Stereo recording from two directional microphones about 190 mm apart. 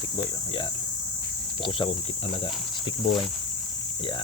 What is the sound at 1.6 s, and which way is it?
Speech, 25° left (ahead or behind).